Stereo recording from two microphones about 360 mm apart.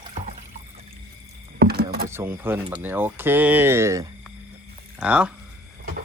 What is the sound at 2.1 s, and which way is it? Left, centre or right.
Speech, centre.